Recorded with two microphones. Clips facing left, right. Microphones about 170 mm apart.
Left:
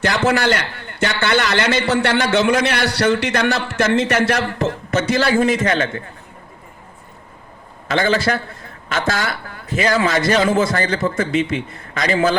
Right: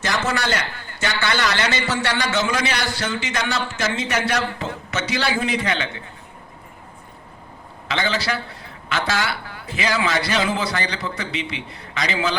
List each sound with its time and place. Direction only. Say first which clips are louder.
0.3 s a man's voice: left 6 dB; 60° left (ahead or behind); by 6.0 s 45° left (ahead or behind)
7.9 s a man's voice: left 6 dB; 45° left (ahead or behind)